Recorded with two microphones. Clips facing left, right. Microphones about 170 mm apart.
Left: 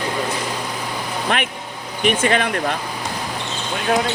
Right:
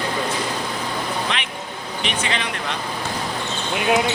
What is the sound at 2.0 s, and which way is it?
Speech, 50° left (ahead or behind).